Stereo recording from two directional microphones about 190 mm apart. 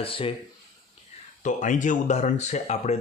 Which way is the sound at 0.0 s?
30° left (ahead or behind).